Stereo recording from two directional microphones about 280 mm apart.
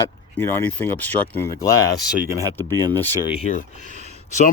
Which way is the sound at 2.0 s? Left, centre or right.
Centre.